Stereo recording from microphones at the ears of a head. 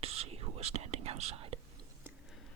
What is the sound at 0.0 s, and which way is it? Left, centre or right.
Whispering, right.